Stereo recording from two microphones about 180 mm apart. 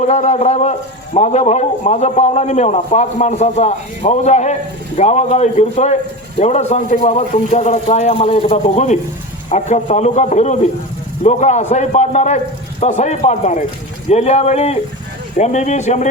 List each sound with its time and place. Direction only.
0.0 s a man's voice: 40° left (ahead or behind)